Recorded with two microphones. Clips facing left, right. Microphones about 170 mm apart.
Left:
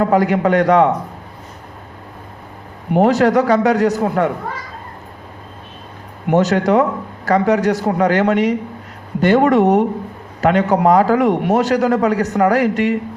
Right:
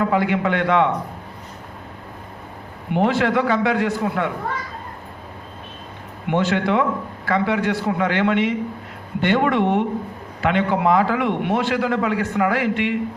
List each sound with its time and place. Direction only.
0.0 s a man's voice: 40° left (ahead or behind)
2.9 s a man's voice: 40° left (ahead or behind)
6.2 s a man's voice: 40° left (ahead or behind)